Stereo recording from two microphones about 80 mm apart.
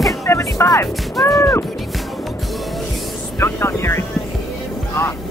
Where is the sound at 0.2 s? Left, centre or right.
Left.